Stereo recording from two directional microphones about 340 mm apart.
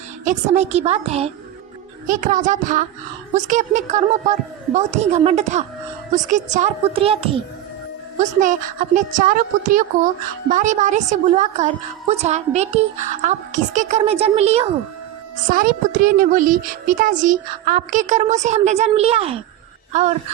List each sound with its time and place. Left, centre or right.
0.3 s a woman's voice: centre